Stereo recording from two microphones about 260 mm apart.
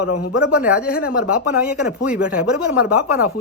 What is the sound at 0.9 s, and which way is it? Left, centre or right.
Speech, left.